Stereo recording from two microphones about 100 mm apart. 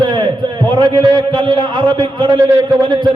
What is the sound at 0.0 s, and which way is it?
A man's voice, 50° right (ahead or behind).